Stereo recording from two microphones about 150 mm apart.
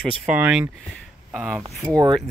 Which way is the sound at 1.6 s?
20° right (ahead or behind).